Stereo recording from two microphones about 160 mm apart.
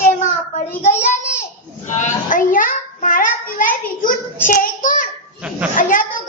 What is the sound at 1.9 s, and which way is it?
Child singing, 50° left (ahead or behind).